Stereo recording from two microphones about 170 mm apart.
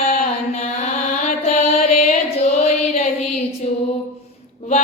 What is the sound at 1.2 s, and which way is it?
Music, 45° left (ahead or behind).